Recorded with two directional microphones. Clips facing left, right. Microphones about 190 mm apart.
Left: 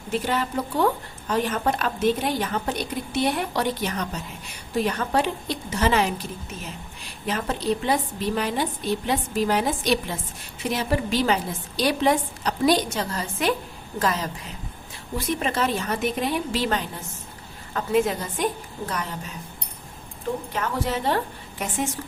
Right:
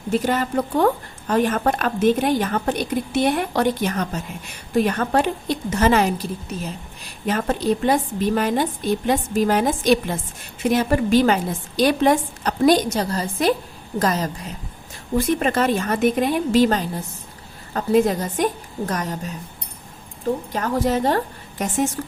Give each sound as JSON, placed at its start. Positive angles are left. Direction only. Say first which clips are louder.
{"t": 0.1, "sound": "a woman's voice", "louder": "right 5 dB", "side_deg": -45}
{"t": 15.4, "sound": "a woman's voice", "louder": "right 5 dB", "side_deg": -50}